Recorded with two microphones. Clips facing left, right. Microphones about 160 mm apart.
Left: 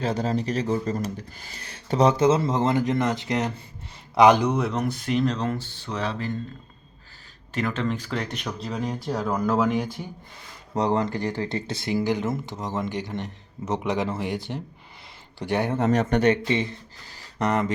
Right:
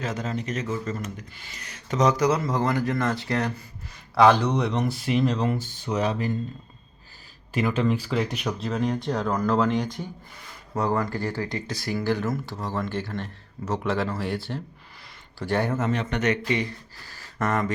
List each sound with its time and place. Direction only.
0.0 s speech: 35° left (ahead or behind); by 6.3 s 15° right (ahead or behind)
7.5 s speech: 10° right (ahead or behind); by 9.9 s 10° left (ahead or behind)
10.8 s speech: 20° left (ahead or behind)
15.8 s speech: 40° left (ahead or behind); by 17.7 s 20° left (ahead or behind)